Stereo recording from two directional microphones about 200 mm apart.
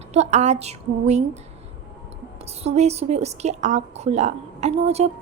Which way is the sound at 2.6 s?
35° right (ahead or behind).